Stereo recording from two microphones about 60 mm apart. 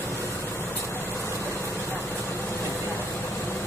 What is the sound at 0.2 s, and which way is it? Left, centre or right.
Vehicle, left.